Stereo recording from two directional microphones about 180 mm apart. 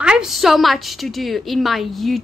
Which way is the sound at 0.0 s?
5° right (ahead or behind).